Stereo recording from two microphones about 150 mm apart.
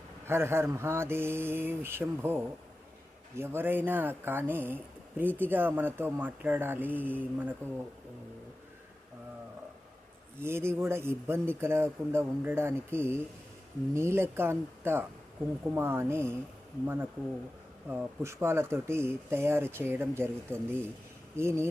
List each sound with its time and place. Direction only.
0.3 s speech: 15° right (ahead or behind)
10.4 s speech: 15° right (ahead or behind)